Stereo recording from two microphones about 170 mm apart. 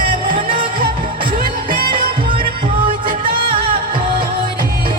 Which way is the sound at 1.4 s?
60° right (ahead or behind).